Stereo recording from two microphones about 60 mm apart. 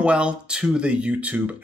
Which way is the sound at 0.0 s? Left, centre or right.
Centre.